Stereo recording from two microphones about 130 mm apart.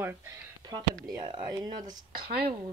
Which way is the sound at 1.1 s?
35° right (ahead or behind).